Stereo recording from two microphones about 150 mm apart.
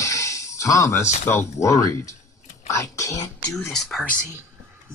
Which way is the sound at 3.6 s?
Centre (ahead or behind).